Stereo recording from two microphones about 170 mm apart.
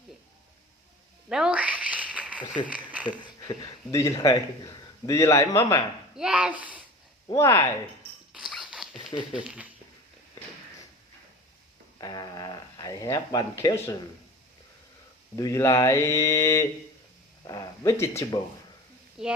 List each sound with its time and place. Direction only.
1.3 s a sound: 5° right (ahead or behind)
2.6 s speech: 10° right (ahead or behind)
3.9 s a man's voice: 20° left (ahead or behind)
6.1 s a child's voice: 5° right (ahead or behind)
7.3 s speech: 20° left (ahead or behind)
8.3 s dog: 5° right (ahead or behind)
9.4 s speech: 5° right (ahead or behind)
11.9 s a sound: 20° left (ahead or behind)
15.4 s speech: 20° left (ahead or behind)
17.4 s a sound: 20° left (ahead or behind)
18.3 s a man's voice: 20° left (ahead or behind)
19.2 s speech: 5° right (ahead or behind)